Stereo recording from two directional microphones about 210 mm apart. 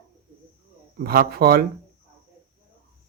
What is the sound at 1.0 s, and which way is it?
Speech, 45° right (ahead or behind).